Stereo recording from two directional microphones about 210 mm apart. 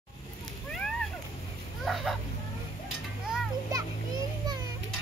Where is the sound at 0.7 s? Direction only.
Centre (ahead or behind).